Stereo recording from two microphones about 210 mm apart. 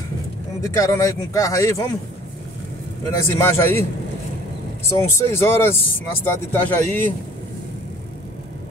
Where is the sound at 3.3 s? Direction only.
10° left (ahead or behind).